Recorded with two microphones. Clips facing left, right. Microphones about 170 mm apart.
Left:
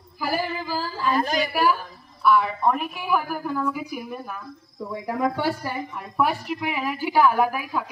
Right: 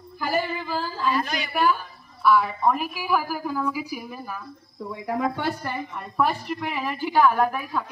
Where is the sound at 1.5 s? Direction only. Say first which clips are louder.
Left 1 dB; 5° left (ahead or behind).